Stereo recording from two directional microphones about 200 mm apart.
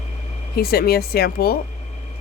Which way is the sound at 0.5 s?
50° left (ahead or behind).